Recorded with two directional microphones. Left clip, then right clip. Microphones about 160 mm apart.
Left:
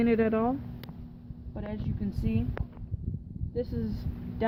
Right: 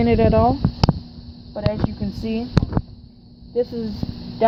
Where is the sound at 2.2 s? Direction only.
30° right (ahead or behind).